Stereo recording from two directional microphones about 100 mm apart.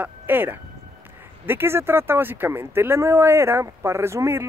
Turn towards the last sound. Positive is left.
turn(degrees=-25)  # may be behind; listen again after turning